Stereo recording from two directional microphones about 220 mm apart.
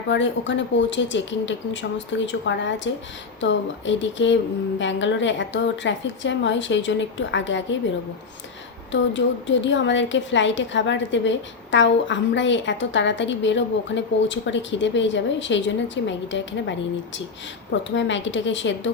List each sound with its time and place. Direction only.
0.1 s a woman's voice: 55° left (ahead or behind)
8.9 s a woman's voice: 55° left (ahead or behind)
17.8 s a woman's voice: 55° left (ahead or behind)